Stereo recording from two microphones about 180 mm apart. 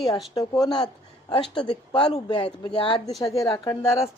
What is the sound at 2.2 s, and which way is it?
Speech, 25° left (ahead or behind).